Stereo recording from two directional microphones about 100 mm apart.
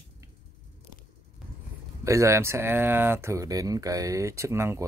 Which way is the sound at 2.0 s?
30° right (ahead or behind).